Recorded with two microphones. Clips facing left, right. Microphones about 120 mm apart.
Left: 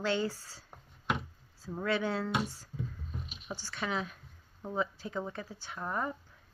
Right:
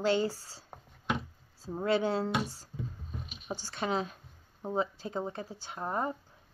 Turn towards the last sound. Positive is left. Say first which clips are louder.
# right 2 dB
turn(degrees=-30)  # may be behind; listen again after turning